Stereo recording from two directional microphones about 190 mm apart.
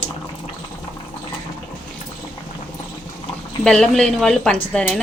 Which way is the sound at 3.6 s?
5° left (ahead or behind).